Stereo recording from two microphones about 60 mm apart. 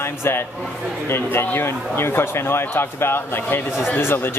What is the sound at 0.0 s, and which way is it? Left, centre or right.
A man's voice, left.